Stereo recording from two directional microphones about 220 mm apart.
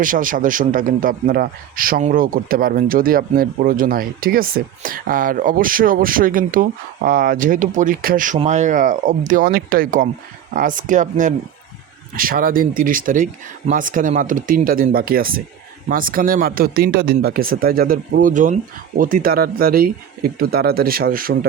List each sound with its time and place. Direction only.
0.0 s a man's voice: 40° right (ahead or behind)